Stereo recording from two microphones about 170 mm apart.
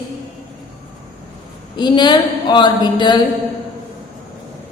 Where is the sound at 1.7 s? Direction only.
25° left (ahead or behind).